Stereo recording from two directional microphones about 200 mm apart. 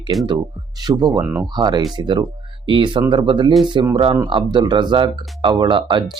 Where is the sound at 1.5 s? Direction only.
20° right (ahead or behind).